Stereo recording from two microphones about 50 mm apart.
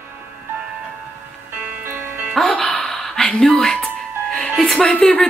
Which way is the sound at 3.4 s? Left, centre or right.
Centre.